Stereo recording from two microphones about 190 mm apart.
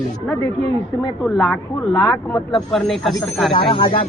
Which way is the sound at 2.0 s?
20° left (ahead or behind).